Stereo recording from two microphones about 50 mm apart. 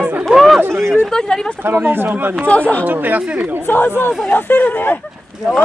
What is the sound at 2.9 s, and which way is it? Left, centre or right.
Speech, right.